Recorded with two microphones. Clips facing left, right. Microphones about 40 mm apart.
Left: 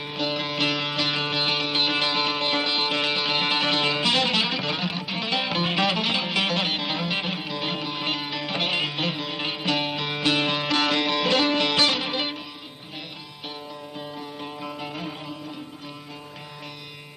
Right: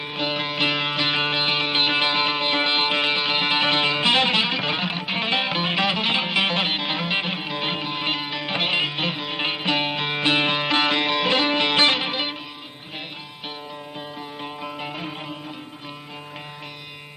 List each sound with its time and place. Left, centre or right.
0.0 s music: right
14.2 s music: right